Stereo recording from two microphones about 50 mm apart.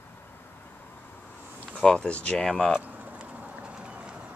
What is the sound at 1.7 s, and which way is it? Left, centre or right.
Speech, centre.